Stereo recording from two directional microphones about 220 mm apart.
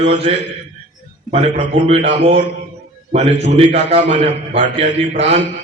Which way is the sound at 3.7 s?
30° right (ahead or behind).